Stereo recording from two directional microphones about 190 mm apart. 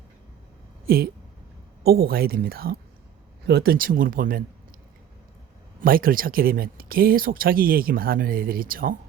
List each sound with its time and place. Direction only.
1.8 s speech: 55° right (ahead or behind)
5.8 s speech: 50° right (ahead or behind)